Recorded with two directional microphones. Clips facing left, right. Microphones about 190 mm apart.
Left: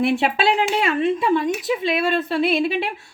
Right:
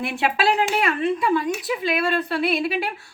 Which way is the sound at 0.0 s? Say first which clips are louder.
Left 3 dB; 25° left (ahead or behind).